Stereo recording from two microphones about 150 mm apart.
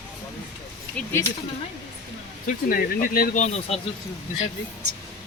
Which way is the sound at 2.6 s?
75° left (ahead or behind).